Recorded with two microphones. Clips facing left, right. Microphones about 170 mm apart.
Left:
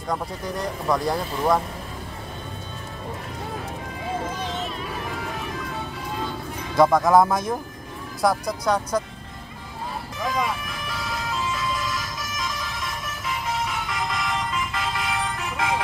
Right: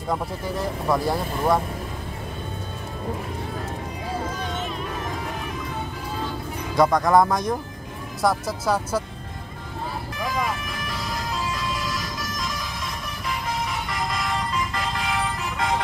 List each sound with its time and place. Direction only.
0.1 s speech: 5° right (ahead or behind)
6.8 s speech: centre (ahead or behind)
10.3 s vehicle: centre (ahead or behind)
13.7 s music: centre (ahead or behind)